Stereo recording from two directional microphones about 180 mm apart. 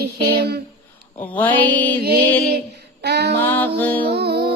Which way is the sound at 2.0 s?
60° right (ahead or behind).